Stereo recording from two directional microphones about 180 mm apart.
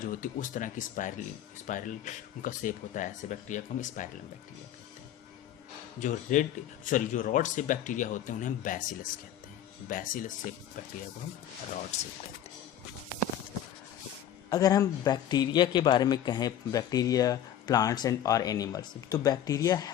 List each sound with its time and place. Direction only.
0.0 s speech: 50° left (ahead or behind)
6.0 s speech: 45° left (ahead or behind)
11.9 s speech: 40° left (ahead or behind)
14.5 s a man's voice: 20° left (ahead or behind)